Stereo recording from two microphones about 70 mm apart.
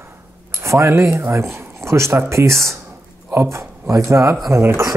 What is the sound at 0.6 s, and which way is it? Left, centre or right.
Speech, right.